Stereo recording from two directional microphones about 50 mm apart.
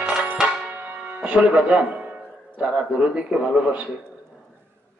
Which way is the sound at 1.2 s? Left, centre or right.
Right.